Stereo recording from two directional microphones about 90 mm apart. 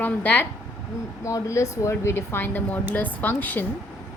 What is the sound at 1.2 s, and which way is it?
A woman's voice, 35° left (ahead or behind).